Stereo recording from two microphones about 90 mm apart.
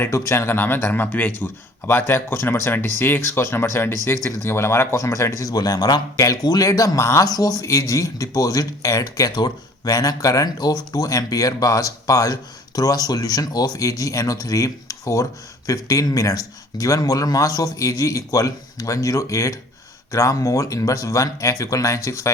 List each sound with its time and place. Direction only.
0.0 s speech: 30° left (ahead or behind)
7.3 s speech: 45° left (ahead or behind)